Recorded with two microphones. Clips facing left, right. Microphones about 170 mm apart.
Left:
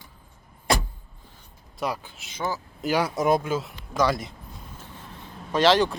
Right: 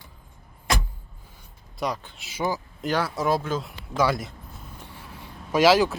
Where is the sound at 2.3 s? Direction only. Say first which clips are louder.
Right 3 dB; 10° right (ahead or behind).